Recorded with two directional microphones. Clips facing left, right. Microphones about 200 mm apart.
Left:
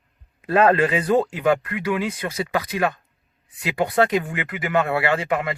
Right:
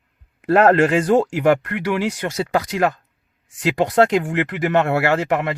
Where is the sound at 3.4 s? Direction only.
90° right.